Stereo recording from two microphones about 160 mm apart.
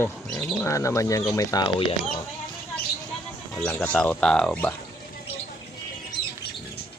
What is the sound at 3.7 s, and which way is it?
Speech, 10° left (ahead or behind).